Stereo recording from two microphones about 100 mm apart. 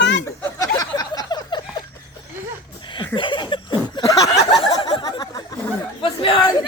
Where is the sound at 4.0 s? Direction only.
35° left (ahead or behind).